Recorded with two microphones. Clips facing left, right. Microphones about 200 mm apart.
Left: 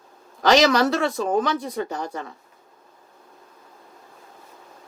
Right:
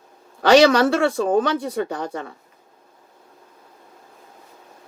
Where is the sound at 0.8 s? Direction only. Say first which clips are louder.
Right 3 dB; 55° right (ahead or behind).